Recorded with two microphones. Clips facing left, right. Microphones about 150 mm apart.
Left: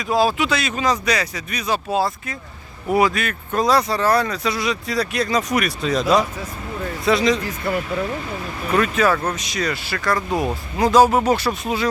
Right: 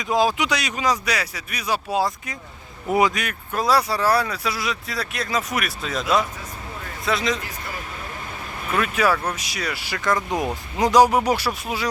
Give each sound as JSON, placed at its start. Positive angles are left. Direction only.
{"t": 0.0, "sound": "speech", "side_deg": -20}
{"t": 7.7, "sound": "speech", "side_deg": 55}
{"t": 8.7, "sound": "speech", "side_deg": -10}